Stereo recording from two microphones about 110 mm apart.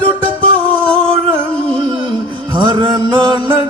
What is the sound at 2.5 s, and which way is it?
Music, 45° right (ahead or behind).